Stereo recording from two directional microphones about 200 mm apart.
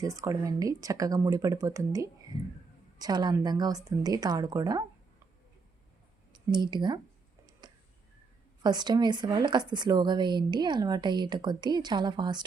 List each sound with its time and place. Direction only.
0.0 s speech: 15° right (ahead or behind)
6.3 s speech: 20° right (ahead or behind)
8.6 s speech: 20° right (ahead or behind)